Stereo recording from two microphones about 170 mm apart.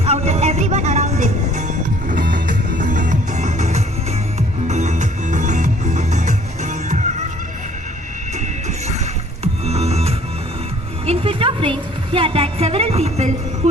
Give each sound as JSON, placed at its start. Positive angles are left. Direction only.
{"t": 0.0, "sound": "music", "side_deg": -40}
{"t": 8.4, "sound": "music", "side_deg": -40}
{"t": 11.0, "sound": "a sound", "side_deg": -35}